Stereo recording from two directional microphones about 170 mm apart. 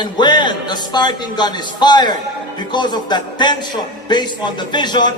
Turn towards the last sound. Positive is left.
turn(degrees=25)  # may be behind; listen again after turning